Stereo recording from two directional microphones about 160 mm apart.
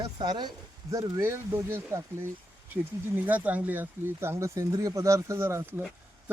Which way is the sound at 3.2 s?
10° right (ahead or behind).